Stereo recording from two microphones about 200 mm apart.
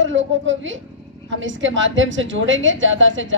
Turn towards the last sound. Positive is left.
turn(degrees=-70)  # may be behind; listen again after turning